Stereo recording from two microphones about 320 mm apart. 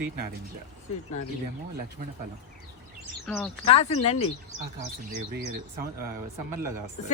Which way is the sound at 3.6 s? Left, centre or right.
Centre.